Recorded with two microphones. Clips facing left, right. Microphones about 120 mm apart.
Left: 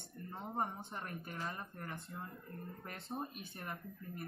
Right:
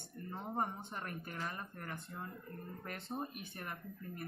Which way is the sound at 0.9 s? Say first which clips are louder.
Right 1 dB; 25° left (ahead or behind).